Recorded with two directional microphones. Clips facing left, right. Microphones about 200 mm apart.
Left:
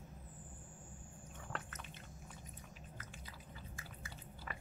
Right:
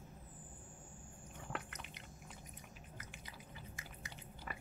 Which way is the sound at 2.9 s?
15° right (ahead or behind).